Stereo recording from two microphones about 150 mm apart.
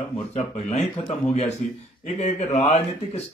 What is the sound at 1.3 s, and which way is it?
Speech, 45° left (ahead or behind).